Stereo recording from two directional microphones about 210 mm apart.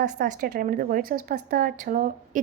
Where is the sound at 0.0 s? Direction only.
40° right (ahead or behind).